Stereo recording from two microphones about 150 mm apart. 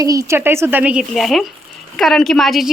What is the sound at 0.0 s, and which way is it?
A woman's voice, 20° right (ahead or behind).